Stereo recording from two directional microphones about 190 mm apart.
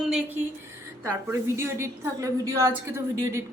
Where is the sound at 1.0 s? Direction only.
15° right (ahead or behind).